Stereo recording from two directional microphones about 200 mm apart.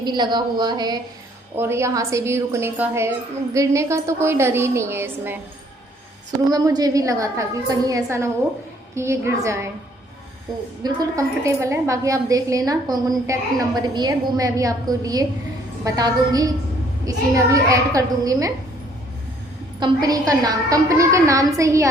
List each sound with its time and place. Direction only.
0.0 s a woman's voice: 20° right (ahead or behind)
6.5 s a woman's voice: 20° right (ahead or behind)
10.8 s a woman's voice: 15° right (ahead or behind)
19.8 s a woman's voice: 20° right (ahead or behind)